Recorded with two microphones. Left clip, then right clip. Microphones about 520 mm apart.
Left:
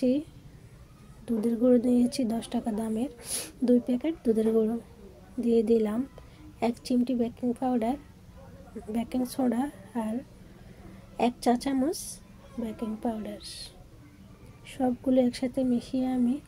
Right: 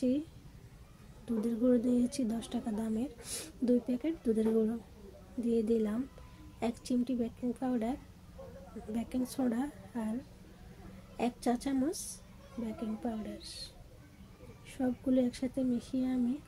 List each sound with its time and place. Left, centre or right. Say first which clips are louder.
1.2 s a woman's voice: left 6 dB; right
11.1 s a woman's voice: left 8 dB; right
14.7 s a woman's voice: left 6 dB; right